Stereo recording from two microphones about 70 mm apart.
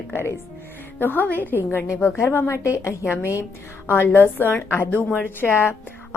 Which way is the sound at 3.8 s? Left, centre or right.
Left.